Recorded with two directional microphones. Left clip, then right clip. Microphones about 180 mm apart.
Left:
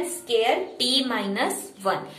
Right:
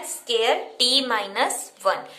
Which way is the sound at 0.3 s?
40° right (ahead or behind).